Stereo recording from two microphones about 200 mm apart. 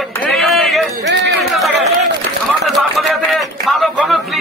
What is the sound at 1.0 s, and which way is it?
Run, 55° right (ahead or behind).